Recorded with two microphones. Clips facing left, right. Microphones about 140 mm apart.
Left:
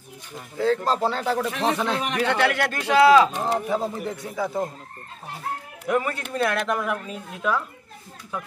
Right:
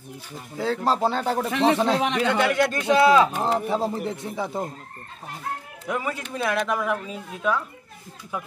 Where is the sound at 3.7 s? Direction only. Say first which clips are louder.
Right 1 dB; 25° right (ahead or behind).